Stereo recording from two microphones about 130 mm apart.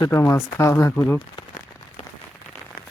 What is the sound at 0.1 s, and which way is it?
Speech, 20° left (ahead or behind).